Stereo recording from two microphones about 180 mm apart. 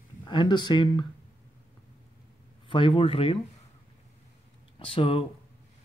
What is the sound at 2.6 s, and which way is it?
Speech, 30° left (ahead or behind).